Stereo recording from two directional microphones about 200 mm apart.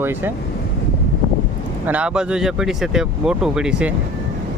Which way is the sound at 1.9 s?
5° right (ahead or behind).